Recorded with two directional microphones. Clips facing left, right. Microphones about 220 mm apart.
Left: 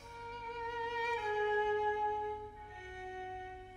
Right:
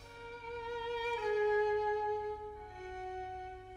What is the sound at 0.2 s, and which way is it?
Music, 35° right (ahead or behind).